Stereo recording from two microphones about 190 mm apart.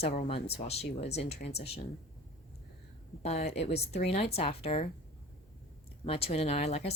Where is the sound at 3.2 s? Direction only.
35° left (ahead or behind).